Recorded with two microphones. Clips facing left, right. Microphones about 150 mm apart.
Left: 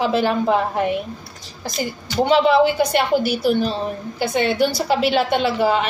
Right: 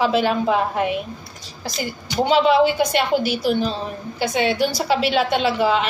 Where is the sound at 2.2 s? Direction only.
50° left (ahead or behind).